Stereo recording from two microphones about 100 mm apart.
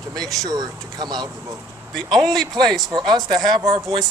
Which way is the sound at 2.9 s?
45° right (ahead or behind).